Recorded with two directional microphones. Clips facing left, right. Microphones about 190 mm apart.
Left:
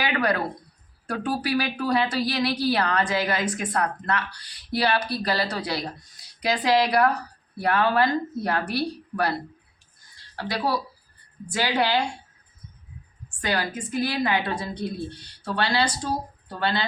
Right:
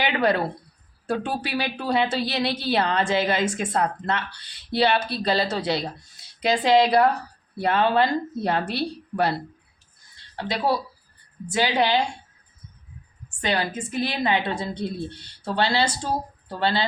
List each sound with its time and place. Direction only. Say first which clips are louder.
0.0 s a sound: right 2 dB; 25° right (ahead or behind)
1.0 s a woman's voice: even; 25° right (ahead or behind)
10.3 s a woman's voice: right 2 dB; 25° right (ahead or behind)
13.4 s a woman's voice: right 2 dB; 25° right (ahead or behind)